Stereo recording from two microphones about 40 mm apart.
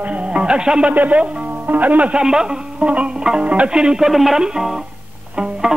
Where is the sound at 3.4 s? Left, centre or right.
Right.